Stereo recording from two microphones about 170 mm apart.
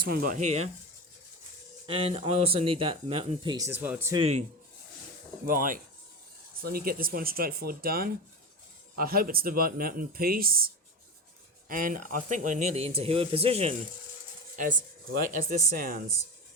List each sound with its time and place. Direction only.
0.1 s speech: 60° right (ahead or behind); by 0.7 s 40° right (ahead or behind)
1.9 s speech: 35° right (ahead or behind)
3.7 s speech: 10° right (ahead or behind)
4.1 s speech: 35° right (ahead or behind)
5.5 s speech: 55° right (ahead or behind)
11.7 s speech: 55° right (ahead or behind); by 13.7 s 35° right (ahead or behind)
14.5 s speech: 50° right (ahead or behind)